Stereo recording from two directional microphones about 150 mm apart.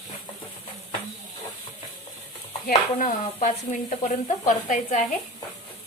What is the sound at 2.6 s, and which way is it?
Speech, 60° left (ahead or behind).